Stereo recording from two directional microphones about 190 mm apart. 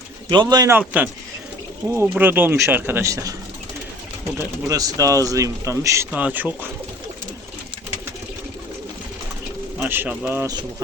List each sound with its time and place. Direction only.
0.3 s speech: 20° right (ahead or behind)
0.8 s speech: 10° right (ahead or behind)
4.4 s speech: 20° right (ahead or behind)
9.7 s speech: 10° right (ahead or behind)